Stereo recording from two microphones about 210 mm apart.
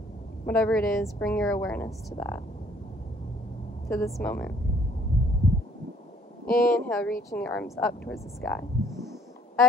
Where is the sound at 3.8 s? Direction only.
Centre (ahead or behind).